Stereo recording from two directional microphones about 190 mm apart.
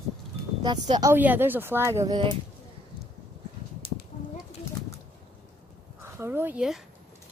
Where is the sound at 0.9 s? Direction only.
15° right (ahead or behind).